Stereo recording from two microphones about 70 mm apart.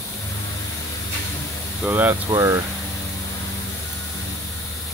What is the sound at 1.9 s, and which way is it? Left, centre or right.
Speech, right.